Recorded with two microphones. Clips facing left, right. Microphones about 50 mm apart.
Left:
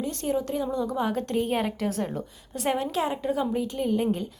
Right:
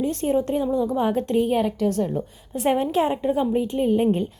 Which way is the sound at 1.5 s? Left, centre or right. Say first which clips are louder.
Right 5 dB; centre.